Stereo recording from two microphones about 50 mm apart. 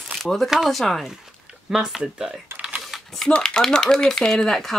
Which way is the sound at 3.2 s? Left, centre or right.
Centre.